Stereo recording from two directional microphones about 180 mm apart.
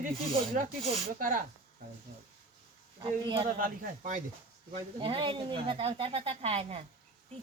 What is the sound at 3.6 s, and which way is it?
Speech, 45° right (ahead or behind).